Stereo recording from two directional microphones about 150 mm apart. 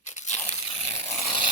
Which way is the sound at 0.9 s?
45° left (ahead or behind).